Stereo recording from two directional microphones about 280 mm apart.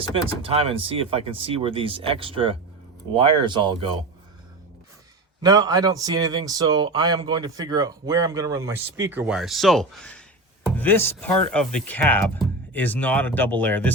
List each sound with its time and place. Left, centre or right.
0.3 s speech: centre
5.4 s speech: centre